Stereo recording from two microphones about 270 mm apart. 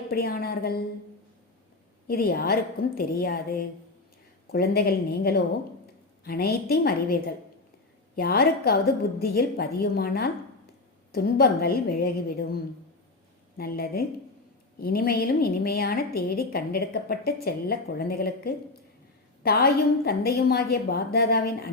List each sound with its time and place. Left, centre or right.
0.1 s a woman's voice: left
2.0 s a woman's voice: left
13.6 s a woman's voice: left